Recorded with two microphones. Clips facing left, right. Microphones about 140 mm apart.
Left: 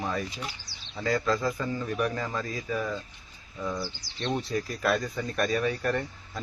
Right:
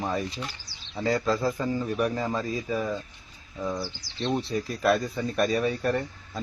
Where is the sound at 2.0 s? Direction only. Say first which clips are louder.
Right 3 dB; 30° right (ahead or behind).